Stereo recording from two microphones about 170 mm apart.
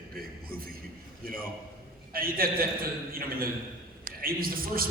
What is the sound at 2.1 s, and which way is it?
A man's voice, 60° right (ahead or behind).